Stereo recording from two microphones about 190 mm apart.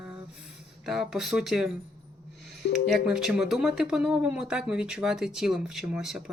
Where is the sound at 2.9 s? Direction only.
5° right (ahead or behind).